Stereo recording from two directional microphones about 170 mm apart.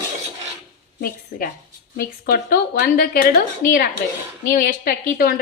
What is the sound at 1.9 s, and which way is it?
A woman's voice, 60° left (ahead or behind).